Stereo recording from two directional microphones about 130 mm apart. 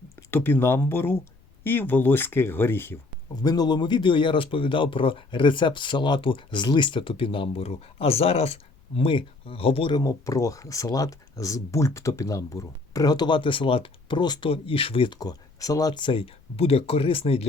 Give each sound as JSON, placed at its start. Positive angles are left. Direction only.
{"t": 0.3, "sound": "speech", "side_deg": 15}
{"t": 3.4, "sound": "speech", "side_deg": 30}
{"t": 9.9, "sound": "speech", "side_deg": 25}